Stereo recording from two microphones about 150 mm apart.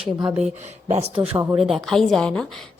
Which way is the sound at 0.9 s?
45° right (ahead or behind).